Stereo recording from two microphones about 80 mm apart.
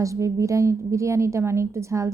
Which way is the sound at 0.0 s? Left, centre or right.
Right.